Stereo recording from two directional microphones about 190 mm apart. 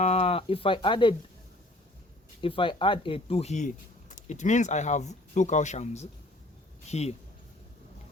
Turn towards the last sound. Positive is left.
turn(degrees=35)  # may be behind; listen again after turning